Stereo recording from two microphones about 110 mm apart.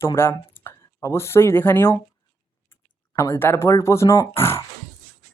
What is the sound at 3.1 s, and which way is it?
Speech, 25° left (ahead or behind).